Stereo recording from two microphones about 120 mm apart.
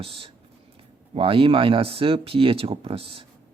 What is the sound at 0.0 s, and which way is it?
Speech, 50° right (ahead or behind).